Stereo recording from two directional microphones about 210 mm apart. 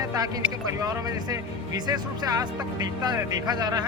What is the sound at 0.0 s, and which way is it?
Speech, 15° right (ahead or behind).